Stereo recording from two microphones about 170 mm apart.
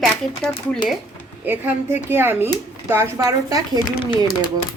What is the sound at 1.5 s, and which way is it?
A woman's voice, 10° right (ahead or behind).